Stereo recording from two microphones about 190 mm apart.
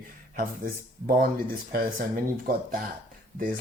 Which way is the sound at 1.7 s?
50° right (ahead or behind).